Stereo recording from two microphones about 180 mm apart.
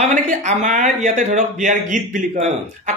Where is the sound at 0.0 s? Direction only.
40° right (ahead or behind).